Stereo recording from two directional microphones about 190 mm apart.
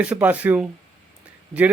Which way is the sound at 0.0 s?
5° right (ahead or behind).